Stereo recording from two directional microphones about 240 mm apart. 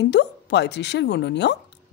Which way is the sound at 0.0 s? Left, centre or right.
Left.